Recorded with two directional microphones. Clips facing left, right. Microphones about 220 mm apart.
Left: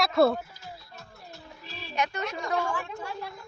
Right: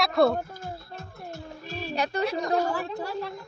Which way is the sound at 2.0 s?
35° right (ahead or behind).